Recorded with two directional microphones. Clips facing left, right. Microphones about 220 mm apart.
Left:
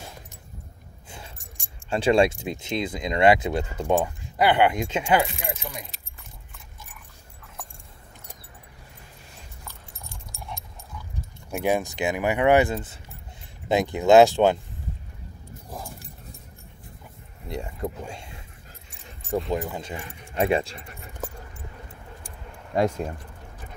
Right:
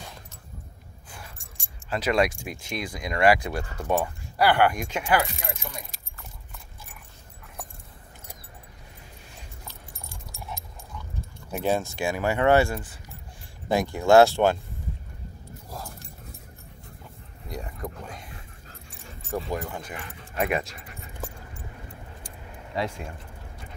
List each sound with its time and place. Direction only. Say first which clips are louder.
1.1 s keys jangling: left 2 dB; 20° left (ahead or behind)
2.0 s speech: left 4 dB; 30° left (ahead or behind)
11.5 s speech: left 2 dB; 15° left (ahead or behind)
17.5 s speech: left 4 dB; 25° left (ahead or behind)
18.1 s dog: left 1 dB; 25° left (ahead or behind)
19.5 s speech: left 4 dB; 20° left (ahead or behind)
22.8 s speech: left 7 dB; 40° left (ahead or behind)